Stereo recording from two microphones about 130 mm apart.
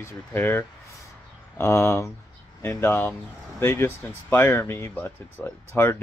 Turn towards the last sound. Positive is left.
turn(degrees=15)  # may be behind; listen again after turning